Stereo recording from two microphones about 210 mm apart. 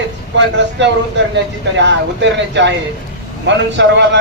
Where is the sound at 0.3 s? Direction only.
60° right (ahead or behind).